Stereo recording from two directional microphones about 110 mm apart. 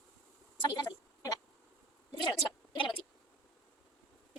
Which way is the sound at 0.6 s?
40° left (ahead or behind).